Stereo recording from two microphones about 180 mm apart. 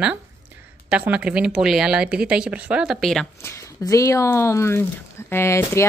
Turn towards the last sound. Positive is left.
turn(degrees=15)  # may be behind; listen again after turning